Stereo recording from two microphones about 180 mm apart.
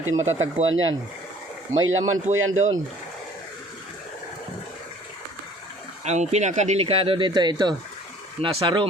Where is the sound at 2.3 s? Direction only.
90° right.